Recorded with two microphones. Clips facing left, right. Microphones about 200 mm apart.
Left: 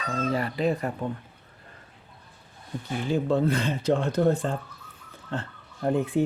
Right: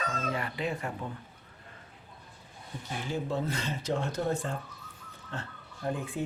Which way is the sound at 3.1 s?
60° left (ahead or behind).